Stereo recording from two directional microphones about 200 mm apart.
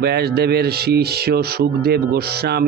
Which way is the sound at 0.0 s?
55° right (ahead or behind).